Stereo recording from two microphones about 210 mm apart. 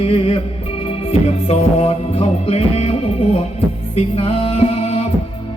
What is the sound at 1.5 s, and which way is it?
Music, 30° left (ahead or behind).